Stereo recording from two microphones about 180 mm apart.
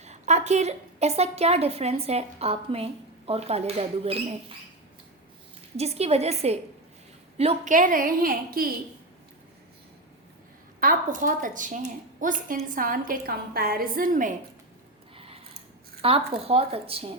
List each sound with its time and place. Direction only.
0.0 s a woman's voice: 40° right (ahead or behind)
5.7 s a woman's voice: 35° right (ahead or behind); by 8.7 s 55° right (ahead or behind)
10.8 s a woman's voice: 50° right (ahead or behind)
15.1 s a sound: 30° right (ahead or behind)
16.0 s a woman's voice: 30° right (ahead or behind)